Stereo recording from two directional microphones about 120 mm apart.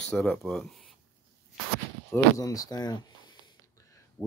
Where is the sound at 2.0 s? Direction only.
30° left (ahead or behind).